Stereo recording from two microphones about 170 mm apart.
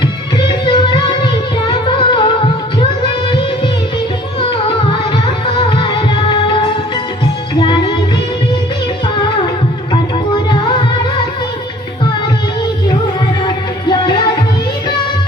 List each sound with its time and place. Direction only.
0.3 s music: 30° left (ahead or behind)
9.9 s music: 30° left (ahead or behind)
13.4 s music: 25° left (ahead or behind)